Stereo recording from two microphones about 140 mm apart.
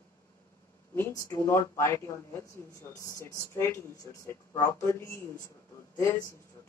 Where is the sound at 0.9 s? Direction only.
15° left (ahead or behind).